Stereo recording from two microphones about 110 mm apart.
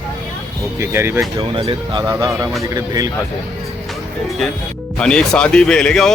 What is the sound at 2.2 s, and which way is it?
Speech, 35° right (ahead or behind).